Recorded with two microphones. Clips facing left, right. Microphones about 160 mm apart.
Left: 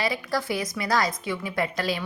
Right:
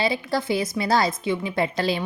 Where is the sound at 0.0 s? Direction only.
25° right (ahead or behind).